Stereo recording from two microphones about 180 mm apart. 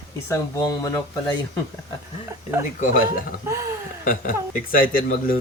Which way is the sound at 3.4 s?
15° right (ahead or behind).